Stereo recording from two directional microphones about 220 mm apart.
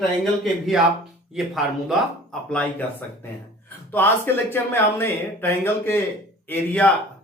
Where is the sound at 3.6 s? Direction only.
10° left (ahead or behind).